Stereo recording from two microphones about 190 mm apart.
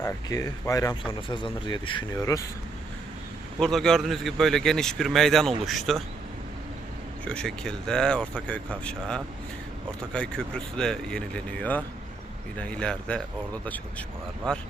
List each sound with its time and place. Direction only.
0.0 s speech: 20° left (ahead or behind)
3.6 s a man's voice: centre (ahead or behind)
7.3 s a man's voice: 5° left (ahead or behind)